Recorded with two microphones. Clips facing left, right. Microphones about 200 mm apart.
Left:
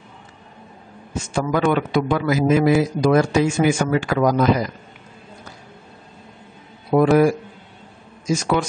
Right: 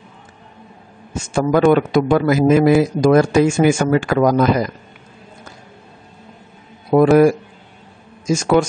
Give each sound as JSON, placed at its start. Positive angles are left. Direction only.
{"t": 1.3, "sound": "a man's voice", "side_deg": -45}
{"t": 6.9, "sound": "speech", "side_deg": -45}
{"t": 8.3, "sound": "a man's voice", "side_deg": -45}